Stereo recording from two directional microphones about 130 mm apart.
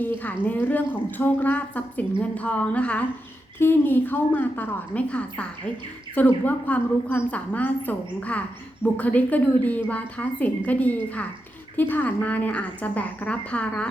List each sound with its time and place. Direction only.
0.0 s a woman's voice: 15° left (ahead or behind)